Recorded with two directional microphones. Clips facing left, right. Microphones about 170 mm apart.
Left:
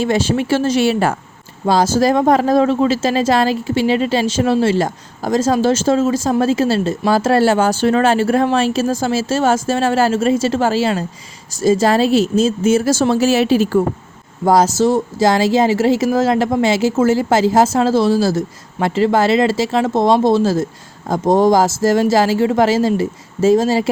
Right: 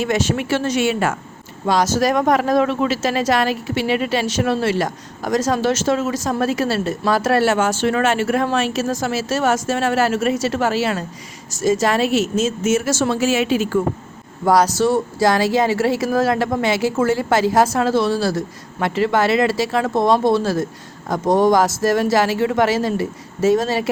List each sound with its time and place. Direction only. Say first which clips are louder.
0.0 s speech: left 3 dB; 30° left (ahead or behind)
14.4 s speech: left 2 dB; 25° left (ahead or behind)